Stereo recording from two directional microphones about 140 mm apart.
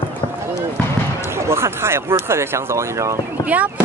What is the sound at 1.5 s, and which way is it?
Speech, 20° right (ahead or behind).